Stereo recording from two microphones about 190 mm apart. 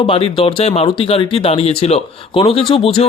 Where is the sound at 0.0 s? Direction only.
30° left (ahead or behind).